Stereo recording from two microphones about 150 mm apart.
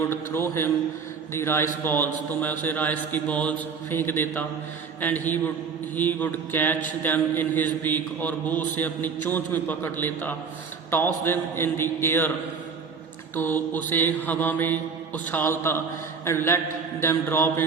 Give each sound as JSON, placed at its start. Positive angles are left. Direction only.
{"t": 0.0, "sound": "mantra", "side_deg": 15}
{"t": 13.3, "sound": "mantra", "side_deg": 15}